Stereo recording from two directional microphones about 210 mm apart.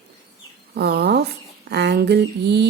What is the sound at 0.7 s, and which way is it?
Speech, 50° right (ahead or behind).